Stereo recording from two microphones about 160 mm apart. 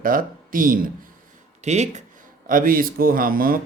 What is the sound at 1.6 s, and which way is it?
Speech, 45° right (ahead or behind).